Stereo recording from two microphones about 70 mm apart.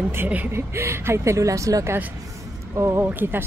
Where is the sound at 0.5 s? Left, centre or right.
Right.